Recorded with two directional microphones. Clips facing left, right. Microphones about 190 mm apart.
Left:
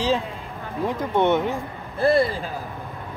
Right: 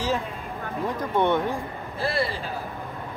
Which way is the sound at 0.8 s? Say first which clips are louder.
Left 3 dB; 20° left (ahead or behind).